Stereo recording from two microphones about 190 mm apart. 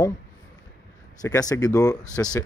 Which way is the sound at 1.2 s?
20° left (ahead or behind).